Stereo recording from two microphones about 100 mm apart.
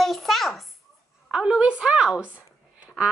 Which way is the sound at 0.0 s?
Centre (ahead or behind).